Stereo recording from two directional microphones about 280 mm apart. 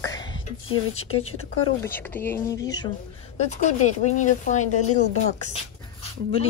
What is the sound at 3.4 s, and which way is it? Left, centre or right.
Speech, left.